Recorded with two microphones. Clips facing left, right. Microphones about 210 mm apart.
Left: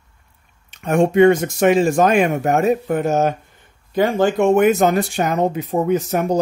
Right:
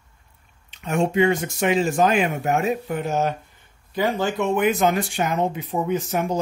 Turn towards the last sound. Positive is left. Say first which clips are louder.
# left 5 dB
turn(degrees=40)  # may be behind; listen again after turning